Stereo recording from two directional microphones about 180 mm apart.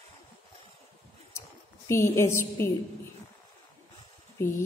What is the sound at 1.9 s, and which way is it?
Speech, 15° left (ahead or behind).